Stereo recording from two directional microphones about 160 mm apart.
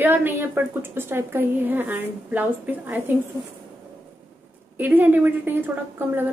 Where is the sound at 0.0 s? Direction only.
15° right (ahead or behind).